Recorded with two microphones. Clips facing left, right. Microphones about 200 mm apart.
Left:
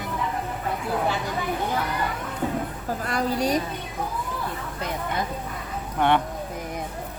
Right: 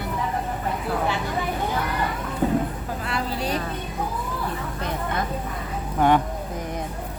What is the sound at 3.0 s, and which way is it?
Speech, 45° left (ahead or behind).